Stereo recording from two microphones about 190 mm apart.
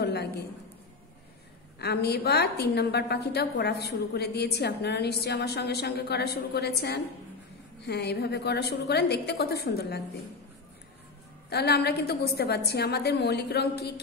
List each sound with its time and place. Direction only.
0.0 s a sound: 60° left (ahead or behind)
1.8 s a woman's voice: 60° left (ahead or behind)
11.5 s a woman's voice: 60° left (ahead or behind)